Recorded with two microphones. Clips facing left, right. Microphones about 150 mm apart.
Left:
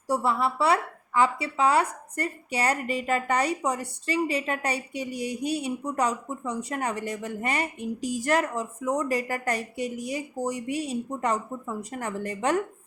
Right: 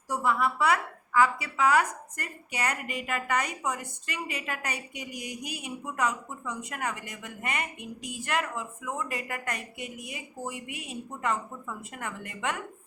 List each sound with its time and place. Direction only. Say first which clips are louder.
0.1 s a woman's voice: left 2 dB; 30° left (ahead or behind)